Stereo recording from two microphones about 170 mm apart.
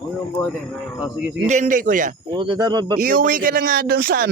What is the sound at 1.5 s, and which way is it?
Speech, 50° right (ahead or behind).